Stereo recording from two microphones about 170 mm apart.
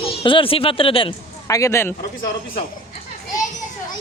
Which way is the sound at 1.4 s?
20° left (ahead or behind).